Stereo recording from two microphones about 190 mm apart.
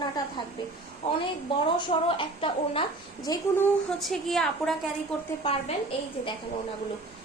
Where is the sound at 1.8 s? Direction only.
25° left (ahead or behind).